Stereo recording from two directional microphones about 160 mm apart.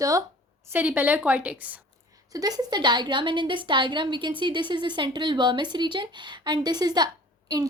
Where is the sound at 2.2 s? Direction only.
25° right (ahead or behind).